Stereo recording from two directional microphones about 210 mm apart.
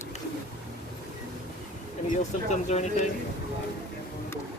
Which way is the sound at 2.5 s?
35° left (ahead or behind).